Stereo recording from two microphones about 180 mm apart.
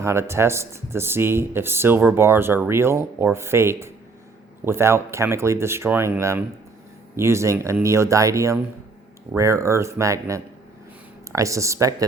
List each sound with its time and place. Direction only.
0.0 s speech: 15° right (ahead or behind)